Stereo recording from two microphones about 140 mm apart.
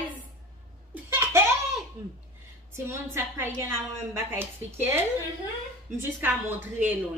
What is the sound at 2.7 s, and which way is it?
A woman's voice, 15° right (ahead or behind).